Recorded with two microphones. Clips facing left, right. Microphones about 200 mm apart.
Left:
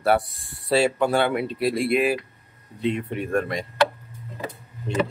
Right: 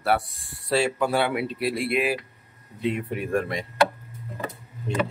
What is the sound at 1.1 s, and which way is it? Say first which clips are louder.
Speech: left 2 dB; 5° right (ahead or behind).